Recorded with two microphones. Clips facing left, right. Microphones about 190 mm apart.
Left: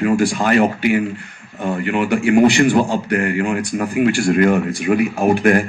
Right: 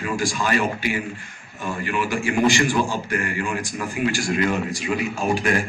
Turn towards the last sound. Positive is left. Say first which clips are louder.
# left 8 dB
turn(degrees=60)  # may be behind; listen again after turning